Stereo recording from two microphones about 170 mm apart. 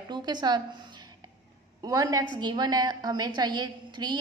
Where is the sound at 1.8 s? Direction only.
20° right (ahead or behind).